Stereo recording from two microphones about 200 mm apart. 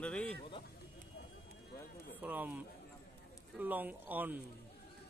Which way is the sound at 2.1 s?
10° right (ahead or behind).